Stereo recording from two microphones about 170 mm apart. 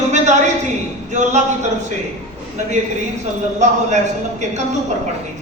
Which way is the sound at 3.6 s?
45° right (ahead or behind).